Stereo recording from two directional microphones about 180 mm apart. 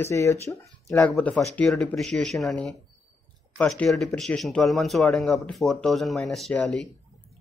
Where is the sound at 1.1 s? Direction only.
5° left (ahead or behind).